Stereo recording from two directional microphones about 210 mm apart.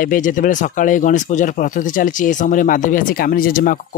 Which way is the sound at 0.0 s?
40° left (ahead or behind).